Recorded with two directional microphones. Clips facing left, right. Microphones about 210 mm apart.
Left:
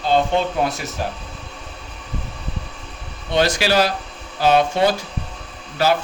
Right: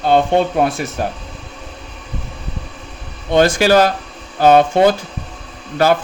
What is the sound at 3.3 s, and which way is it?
A man's voice, 50° right (ahead or behind).